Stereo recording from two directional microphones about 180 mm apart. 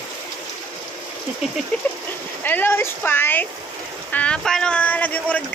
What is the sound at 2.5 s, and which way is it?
Speech, 10° left (ahead or behind).